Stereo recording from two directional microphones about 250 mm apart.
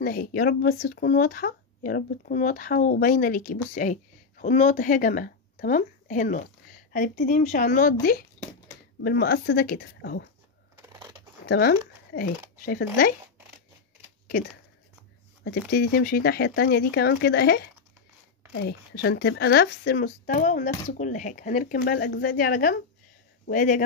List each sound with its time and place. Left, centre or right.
0.0 s speech: left
10.8 s a sound: centre
11.4 s speech: left
15.4 s a man's voice: left